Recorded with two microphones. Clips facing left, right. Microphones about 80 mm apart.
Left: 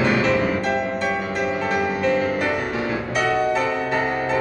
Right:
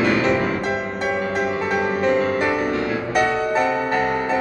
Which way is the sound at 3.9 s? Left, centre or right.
Centre.